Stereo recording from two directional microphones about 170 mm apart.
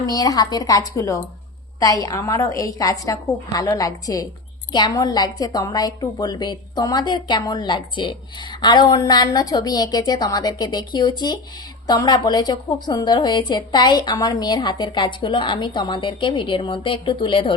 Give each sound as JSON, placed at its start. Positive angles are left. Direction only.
{"t": 0.0, "sound": "a woman's voice", "side_deg": 20}